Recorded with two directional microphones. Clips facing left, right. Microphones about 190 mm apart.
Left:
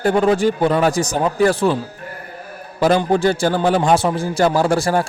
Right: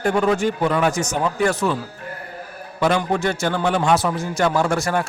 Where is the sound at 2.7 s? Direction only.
35° left (ahead or behind).